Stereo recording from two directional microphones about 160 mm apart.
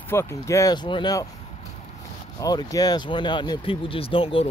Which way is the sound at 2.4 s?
20° left (ahead or behind).